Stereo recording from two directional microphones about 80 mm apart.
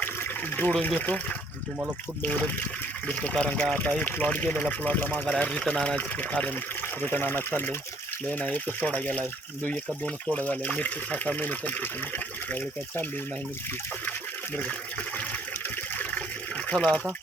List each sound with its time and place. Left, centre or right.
0.5 s speech: centre
2.2 s speech: centre
10.3 s speech: centre
16.6 s speech: centre